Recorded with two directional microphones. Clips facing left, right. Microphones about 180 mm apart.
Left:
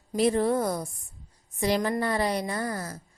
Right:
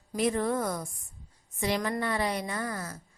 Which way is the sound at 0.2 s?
30° left (ahead or behind).